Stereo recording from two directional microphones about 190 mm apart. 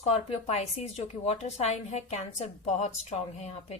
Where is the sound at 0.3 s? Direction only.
35° left (ahead or behind).